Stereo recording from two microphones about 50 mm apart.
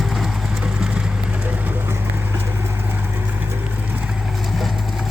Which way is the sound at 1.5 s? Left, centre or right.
Right.